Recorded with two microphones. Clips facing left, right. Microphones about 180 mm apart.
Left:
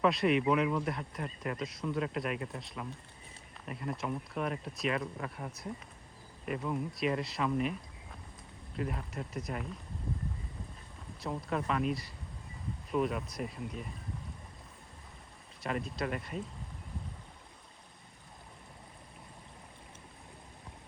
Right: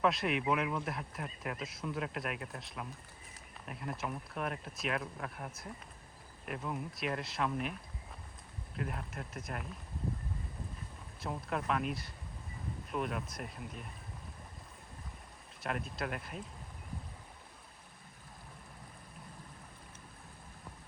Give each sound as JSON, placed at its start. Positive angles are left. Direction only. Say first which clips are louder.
{"t": 0.0, "sound": "speech", "louder": "left 4 dB", "side_deg": 0}
{"t": 11.2, "sound": "speech", "louder": "left 3 dB", "side_deg": 0}
{"t": 15.6, "sound": "speech", "louder": "left 3 dB", "side_deg": 0}